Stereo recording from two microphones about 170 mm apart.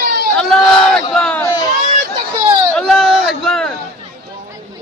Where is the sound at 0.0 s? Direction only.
65° right (ahead or behind).